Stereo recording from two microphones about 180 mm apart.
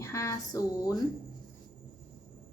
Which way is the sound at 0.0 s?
15° left (ahead or behind).